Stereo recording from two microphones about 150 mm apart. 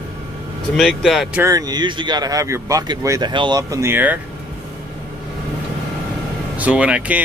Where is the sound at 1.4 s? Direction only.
25° right (ahead or behind).